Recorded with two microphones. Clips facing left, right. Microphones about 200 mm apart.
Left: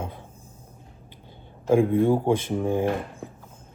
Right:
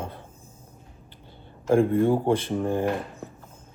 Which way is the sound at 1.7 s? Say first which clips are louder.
Left 1 dB; 15° left (ahead or behind).